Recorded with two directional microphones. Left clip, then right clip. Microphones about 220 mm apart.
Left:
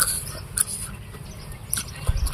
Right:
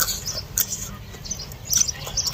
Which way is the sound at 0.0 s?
10° left (ahead or behind).